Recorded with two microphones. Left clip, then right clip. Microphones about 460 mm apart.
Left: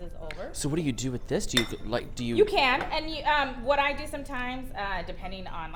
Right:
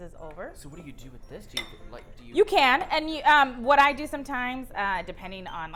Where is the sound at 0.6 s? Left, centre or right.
Left.